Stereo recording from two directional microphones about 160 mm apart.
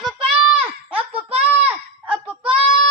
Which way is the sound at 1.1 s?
40° right (ahead or behind).